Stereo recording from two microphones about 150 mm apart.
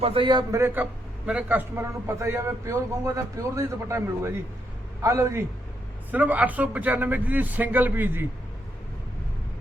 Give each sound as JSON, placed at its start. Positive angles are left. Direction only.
{"t": 0.0, "sound": "a man's voice", "side_deg": -35}
{"t": 0.5, "sound": "a man's voice", "side_deg": -15}